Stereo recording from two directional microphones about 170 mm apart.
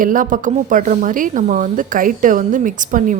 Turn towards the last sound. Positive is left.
turn(degrees=-50)  # may be behind; listen again after turning